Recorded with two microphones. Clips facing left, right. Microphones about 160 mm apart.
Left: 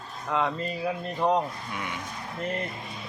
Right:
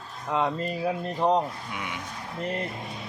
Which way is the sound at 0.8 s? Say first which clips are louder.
Right 2 dB; 30° right (ahead or behind).